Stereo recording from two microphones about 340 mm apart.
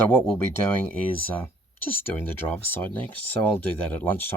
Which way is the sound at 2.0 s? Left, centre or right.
Centre.